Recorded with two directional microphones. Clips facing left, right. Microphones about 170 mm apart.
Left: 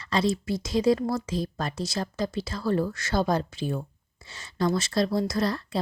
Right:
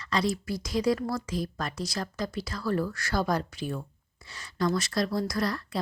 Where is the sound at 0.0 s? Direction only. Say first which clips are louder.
Left 3 dB; 25° left (ahead or behind).